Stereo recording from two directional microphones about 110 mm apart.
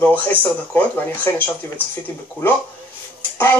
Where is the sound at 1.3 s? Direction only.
25° left (ahead or behind).